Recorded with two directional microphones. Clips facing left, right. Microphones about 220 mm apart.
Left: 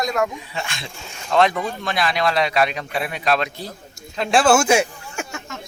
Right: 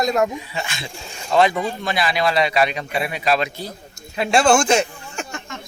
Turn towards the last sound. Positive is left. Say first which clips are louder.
# even
turn(degrees=10)  # may be behind; listen again after turning